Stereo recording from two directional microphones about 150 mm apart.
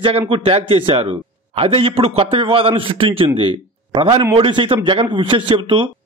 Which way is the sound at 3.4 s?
35° right (ahead or behind).